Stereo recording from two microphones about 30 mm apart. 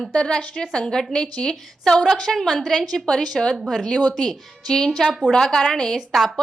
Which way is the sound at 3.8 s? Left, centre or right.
Centre.